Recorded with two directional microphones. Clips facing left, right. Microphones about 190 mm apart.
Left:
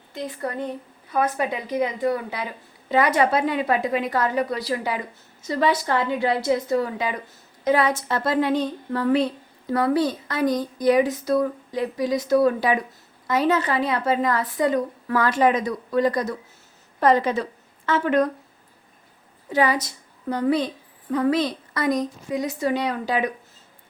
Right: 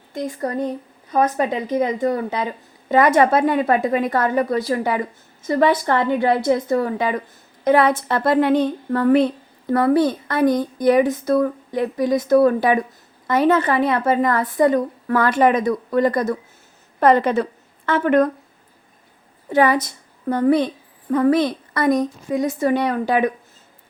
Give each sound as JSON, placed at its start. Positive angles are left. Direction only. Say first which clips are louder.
{"t": 0.1, "sound": "a child's voice", "louder": "right 5 dB", "side_deg": -45}
{"t": 19.5, "sound": "a woman's voice", "louder": "right 5 dB", "side_deg": -55}